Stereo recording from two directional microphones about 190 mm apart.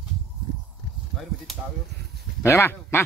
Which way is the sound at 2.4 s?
15° left (ahead or behind).